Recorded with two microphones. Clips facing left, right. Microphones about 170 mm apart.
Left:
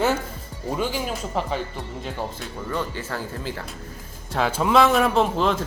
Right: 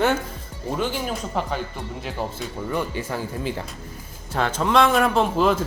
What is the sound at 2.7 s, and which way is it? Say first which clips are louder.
Speech: right 2 dB; 15° right (ahead or behind).